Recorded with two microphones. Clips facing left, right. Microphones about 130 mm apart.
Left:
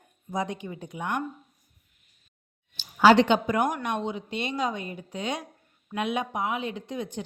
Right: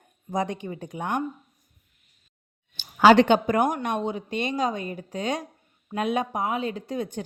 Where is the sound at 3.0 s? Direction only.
55° right (ahead or behind).